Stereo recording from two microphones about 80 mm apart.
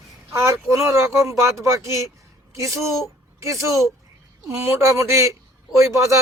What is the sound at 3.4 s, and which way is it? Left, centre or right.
Speech, right.